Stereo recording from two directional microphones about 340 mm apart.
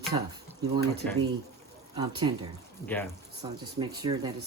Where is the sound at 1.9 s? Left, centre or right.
Centre.